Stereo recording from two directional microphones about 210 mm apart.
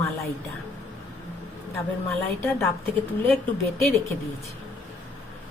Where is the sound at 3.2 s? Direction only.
Centre (ahead or behind).